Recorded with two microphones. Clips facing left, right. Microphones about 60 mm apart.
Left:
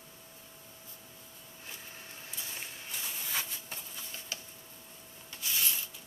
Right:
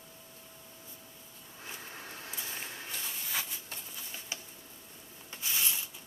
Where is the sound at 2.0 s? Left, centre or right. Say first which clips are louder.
Right 4 dB; right.